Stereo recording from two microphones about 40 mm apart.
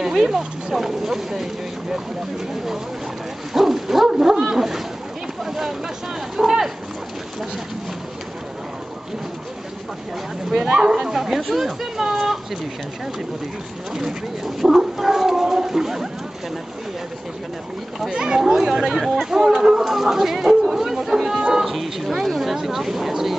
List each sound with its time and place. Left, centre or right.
0.0 s speech: centre
3.5 s bow-wow: centre
4.4 s a sound: centre
5.4 s speech: centre
6.3 s a sound: centre
10.5 s speech: centre
13.9 s speech: centre
18.1 s speech: centre
21.4 s speech: centre
21.6 s speech: centre